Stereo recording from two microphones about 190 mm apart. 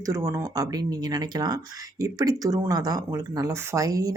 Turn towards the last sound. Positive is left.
turn(degrees=-20)  # may be behind; listen again after turning